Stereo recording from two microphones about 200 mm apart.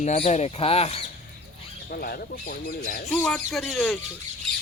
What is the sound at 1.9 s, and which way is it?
Speech, 50° left (ahead or behind).